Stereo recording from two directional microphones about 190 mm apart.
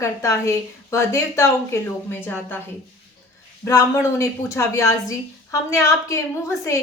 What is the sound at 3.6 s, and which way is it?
A woman's voice, 15° left (ahead or behind).